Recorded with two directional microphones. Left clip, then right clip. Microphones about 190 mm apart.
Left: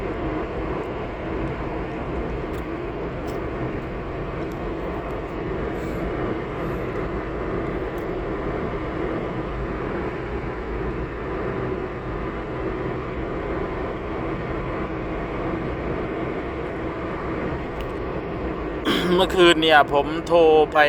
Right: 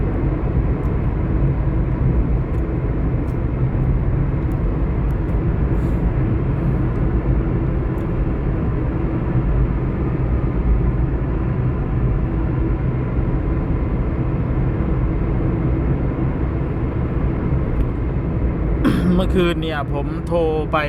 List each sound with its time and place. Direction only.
18.9 s speech: 15° left (ahead or behind)